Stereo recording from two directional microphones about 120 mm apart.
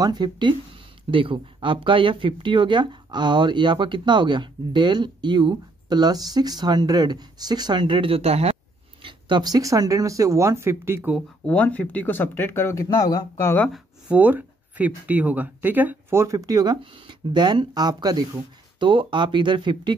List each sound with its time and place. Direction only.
0.0 s speech: 35° right (ahead or behind); by 8.5 s 60° right (ahead or behind)
9.0 s speech: 35° right (ahead or behind); by 11.1 s 20° right (ahead or behind)
11.4 s speech: 10° left (ahead or behind); by 13.5 s 30° left (ahead or behind)
13.7 s a sound: centre (ahead or behind)
14.1 s speech: 15° right (ahead or behind); by 20.0 s 40° right (ahead or behind)